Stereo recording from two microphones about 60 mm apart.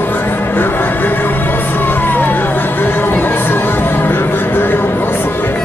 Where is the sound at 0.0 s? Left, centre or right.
Left.